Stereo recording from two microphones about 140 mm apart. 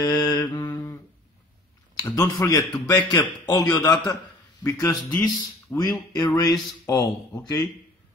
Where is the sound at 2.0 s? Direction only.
25° left (ahead or behind).